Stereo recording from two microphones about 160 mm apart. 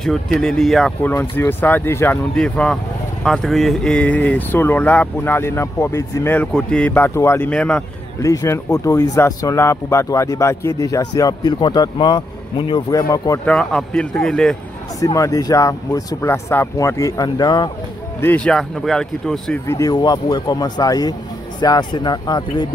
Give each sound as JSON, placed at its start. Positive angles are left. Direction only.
{"t": 0.0, "sound": "speech", "side_deg": 0}
{"t": 1.3, "sound": "speech", "side_deg": 15}
{"t": 8.2, "sound": "speech", "side_deg": 20}
{"t": 13.5, "sound": "speech", "side_deg": 5}
{"t": 15.0, "sound": "speech", "side_deg": 20}
{"t": 18.2, "sound": "speech", "side_deg": 10}
{"t": 19.7, "sound": "speech", "side_deg": 25}